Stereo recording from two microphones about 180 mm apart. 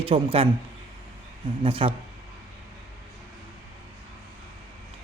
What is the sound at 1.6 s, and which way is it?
Speech, 30° right (ahead or behind).